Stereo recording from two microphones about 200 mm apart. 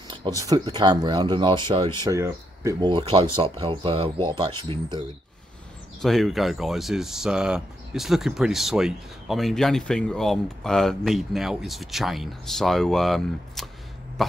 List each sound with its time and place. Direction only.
0.4 s speech: 20° right (ahead or behind)
5.9 s speech: centre (ahead or behind)